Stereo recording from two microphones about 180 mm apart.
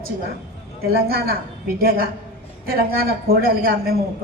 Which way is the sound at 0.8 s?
60° right (ahead or behind).